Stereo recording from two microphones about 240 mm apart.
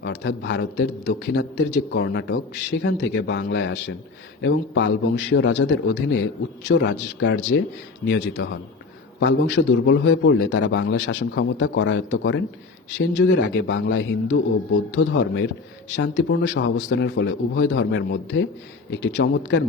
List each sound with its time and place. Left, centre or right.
0.0 s a man's voice: left